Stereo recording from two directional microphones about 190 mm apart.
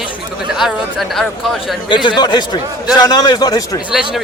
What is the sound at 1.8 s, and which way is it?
A man's voice, 25° left (ahead or behind).